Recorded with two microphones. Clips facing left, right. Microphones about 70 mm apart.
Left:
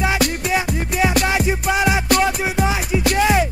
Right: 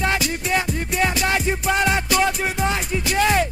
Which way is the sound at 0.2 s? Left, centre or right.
Left.